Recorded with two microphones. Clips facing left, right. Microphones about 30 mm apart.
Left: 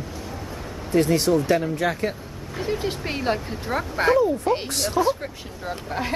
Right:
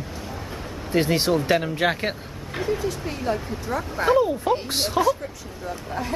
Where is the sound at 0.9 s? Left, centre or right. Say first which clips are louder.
Left 2 dB; right.